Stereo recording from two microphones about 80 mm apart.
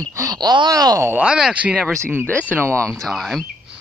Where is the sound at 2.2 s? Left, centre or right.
Centre.